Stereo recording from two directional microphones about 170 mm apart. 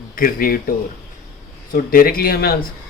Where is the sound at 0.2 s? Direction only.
60° left (ahead or behind).